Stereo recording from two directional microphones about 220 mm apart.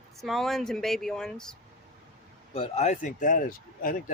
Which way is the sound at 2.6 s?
30° left (ahead or behind).